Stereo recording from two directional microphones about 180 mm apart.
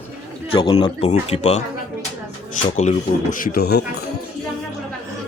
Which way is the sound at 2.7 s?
40° left (ahead or behind).